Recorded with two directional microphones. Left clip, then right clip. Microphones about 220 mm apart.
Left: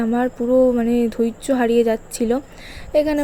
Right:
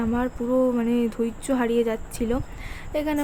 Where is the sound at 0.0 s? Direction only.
15° left (ahead or behind).